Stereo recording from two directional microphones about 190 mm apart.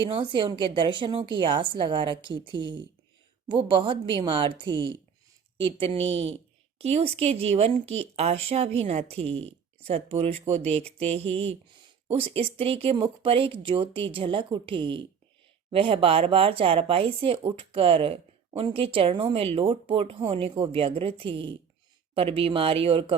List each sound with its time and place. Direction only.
0.1 s a woman's voice: 25° right (ahead or behind)